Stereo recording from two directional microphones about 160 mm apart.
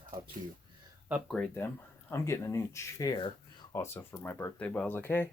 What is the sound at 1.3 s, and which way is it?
Speech, 10° left (ahead or behind).